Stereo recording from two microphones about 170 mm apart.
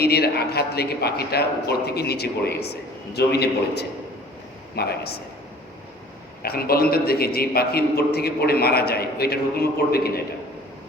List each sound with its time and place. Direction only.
0.0 s a man's voice: 70° left (ahead or behind)
6.4 s a man's voice: 65° left (ahead or behind)